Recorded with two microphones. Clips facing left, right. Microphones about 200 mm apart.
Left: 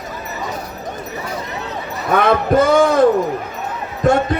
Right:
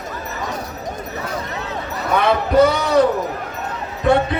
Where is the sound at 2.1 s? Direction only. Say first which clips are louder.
Left 1 dB; 50° left (ahead or behind).